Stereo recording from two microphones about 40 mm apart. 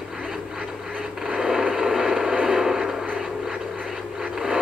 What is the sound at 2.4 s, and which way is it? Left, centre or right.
Music, centre.